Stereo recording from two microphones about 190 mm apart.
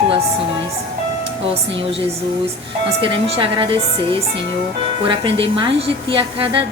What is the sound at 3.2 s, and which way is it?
Speech, 30° right (ahead or behind).